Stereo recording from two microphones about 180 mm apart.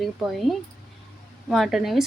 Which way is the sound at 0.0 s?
Centre (ahead or behind).